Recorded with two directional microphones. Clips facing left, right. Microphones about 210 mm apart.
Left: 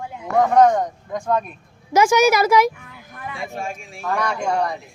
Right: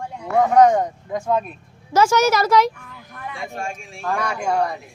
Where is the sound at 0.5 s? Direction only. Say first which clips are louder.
Right 2 dB; 10° right (ahead or behind).